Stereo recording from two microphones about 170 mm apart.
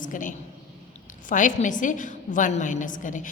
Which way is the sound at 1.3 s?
50° left (ahead or behind).